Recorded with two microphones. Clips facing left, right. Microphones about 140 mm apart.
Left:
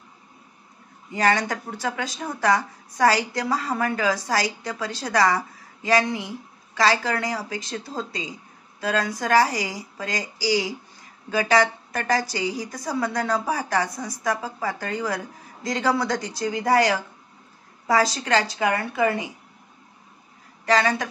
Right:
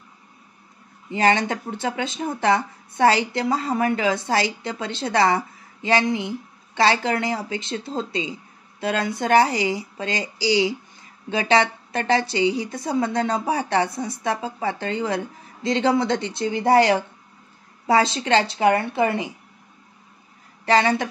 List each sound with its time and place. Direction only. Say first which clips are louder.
1.1 s speech: right 2 dB; 25° right (ahead or behind)
20.6 s speech: right 2 dB; 30° right (ahead or behind)